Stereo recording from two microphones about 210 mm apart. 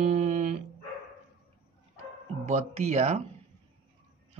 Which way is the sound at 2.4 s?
30° right (ahead or behind).